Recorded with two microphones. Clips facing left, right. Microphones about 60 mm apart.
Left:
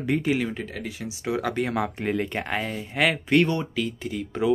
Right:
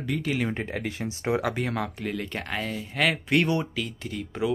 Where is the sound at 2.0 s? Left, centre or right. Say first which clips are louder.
Left 5 dB; left.